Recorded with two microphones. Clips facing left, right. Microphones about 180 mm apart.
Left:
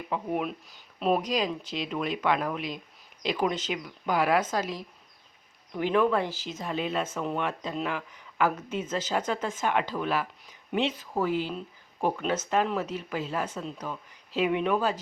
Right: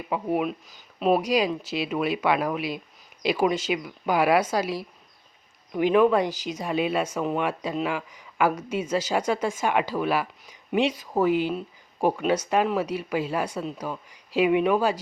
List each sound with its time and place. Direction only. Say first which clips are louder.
0.1 s speech: right 5 dB; 10° right (ahead or behind)